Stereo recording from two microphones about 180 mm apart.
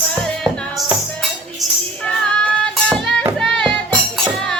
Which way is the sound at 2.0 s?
5° left (ahead or behind).